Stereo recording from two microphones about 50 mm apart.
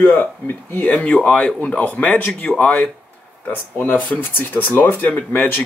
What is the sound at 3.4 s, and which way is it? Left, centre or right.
Speech, left.